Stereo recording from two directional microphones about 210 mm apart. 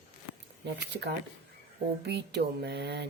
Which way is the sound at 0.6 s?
55° right (ahead or behind).